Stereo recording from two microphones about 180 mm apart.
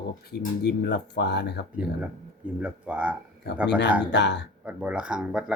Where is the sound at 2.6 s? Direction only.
10° right (ahead or behind).